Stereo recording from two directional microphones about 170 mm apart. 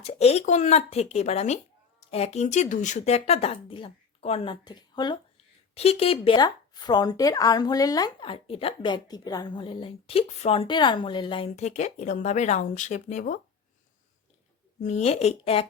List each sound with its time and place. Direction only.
0.0 s speech: 40° left (ahead or behind)
5.7 s speech: 35° left (ahead or behind)
14.8 s speech: 40° left (ahead or behind)